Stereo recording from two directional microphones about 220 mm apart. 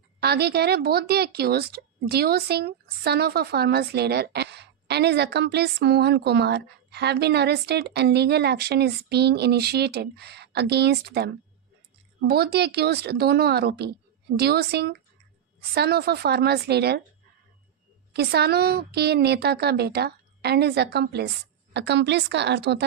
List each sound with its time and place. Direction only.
0.2 s speech: 45° right (ahead or behind)
12.3 s speech: 45° right (ahead or behind)
18.1 s speech: 45° right (ahead or behind)